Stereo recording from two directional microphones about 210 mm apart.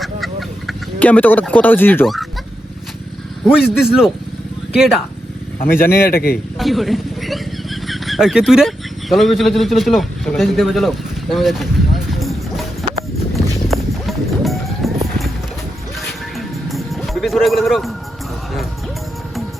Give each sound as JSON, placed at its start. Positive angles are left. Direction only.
{"t": 0.0, "sound": "chicken", "side_deg": 0}
{"t": 3.4, "sound": "a man's voice", "side_deg": 0}
{"t": 6.0, "sound": "a man's voice", "side_deg": 45}
{"t": 6.6, "sound": "vehicle", "side_deg": 0}
{"t": 12.8, "sound": "a sound", "side_deg": 0}
{"t": 13.7, "sound": "clip-clop", "side_deg": 0}
{"t": 16.0, "sound": "music", "side_deg": 0}